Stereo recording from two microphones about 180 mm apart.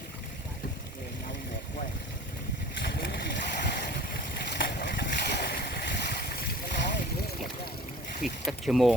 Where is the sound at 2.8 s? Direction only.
65° left (ahead or behind).